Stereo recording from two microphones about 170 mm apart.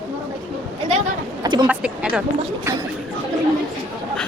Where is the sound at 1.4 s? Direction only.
25° right (ahead or behind).